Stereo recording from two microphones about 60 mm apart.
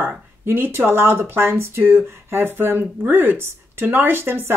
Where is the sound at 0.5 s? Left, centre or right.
Right.